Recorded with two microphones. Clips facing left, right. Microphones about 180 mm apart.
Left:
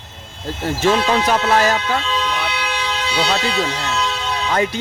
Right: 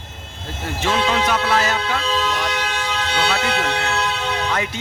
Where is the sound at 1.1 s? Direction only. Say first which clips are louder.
Left 3 dB; 35° left (ahead or behind).